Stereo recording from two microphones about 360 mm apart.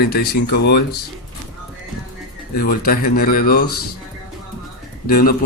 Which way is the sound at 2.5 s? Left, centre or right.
Left.